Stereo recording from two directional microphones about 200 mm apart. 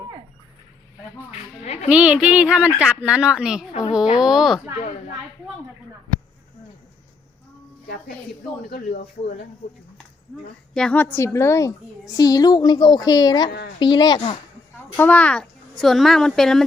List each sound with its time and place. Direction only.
1.6 s a child's voice: 30° left (ahead or behind)
1.9 s a woman's voice: 5° right (ahead or behind)
8.7 s speech: 50° left (ahead or behind)
10.8 s a woman's voice: 5° left (ahead or behind)
13.7 s chopping: 20° left (ahead or behind)
14.8 s a woman's voice: 10° left (ahead or behind)